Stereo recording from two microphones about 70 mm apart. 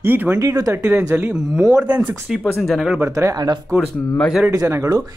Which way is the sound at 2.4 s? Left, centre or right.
Centre.